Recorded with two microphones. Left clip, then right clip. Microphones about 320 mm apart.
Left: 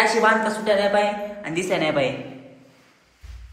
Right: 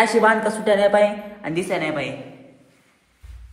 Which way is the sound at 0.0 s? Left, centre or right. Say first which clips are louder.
Right 1 dB; centre.